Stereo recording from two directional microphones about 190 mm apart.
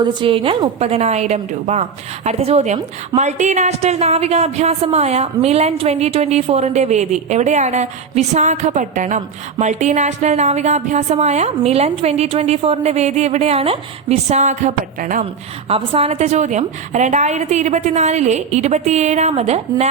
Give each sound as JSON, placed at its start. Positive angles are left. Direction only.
{"t": 0.0, "sound": "a woman's voice", "side_deg": -25}
{"t": 15.7, "sound": "a woman's voice", "side_deg": -30}